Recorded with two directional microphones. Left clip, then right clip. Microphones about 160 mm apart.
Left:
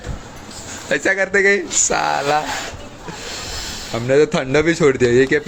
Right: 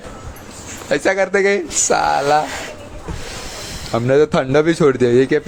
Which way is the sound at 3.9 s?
20° right (ahead or behind).